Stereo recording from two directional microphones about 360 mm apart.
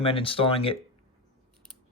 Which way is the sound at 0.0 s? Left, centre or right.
Centre.